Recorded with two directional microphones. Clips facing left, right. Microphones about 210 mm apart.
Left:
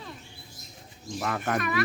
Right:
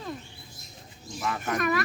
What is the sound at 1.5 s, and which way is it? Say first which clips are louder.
Speech: right 5 dB; 45° right (ahead or behind).